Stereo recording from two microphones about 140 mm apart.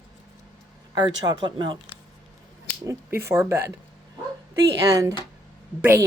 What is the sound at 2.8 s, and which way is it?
A woman's voice, 20° right (ahead or behind).